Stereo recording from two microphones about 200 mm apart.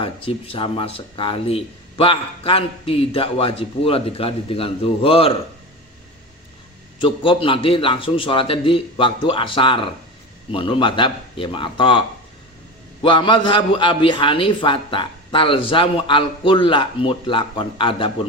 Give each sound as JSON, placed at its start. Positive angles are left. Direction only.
{"t": 0.0, "sound": "speech", "side_deg": 25}
{"t": 7.0, "sound": "speech", "side_deg": 25}